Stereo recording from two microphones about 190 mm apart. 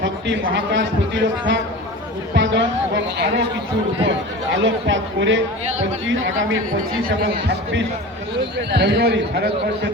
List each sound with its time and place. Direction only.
0.0 s a man's voice: 75° right (ahead or behind)
4.5 s speech: 80° right
6.7 s a woman's voice: 50° right (ahead or behind)
8.4 s a man's voice: 65° right (ahead or behind)